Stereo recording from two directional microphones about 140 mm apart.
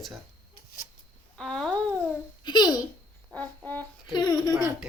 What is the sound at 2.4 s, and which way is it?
Speech, 30° left (ahead or behind).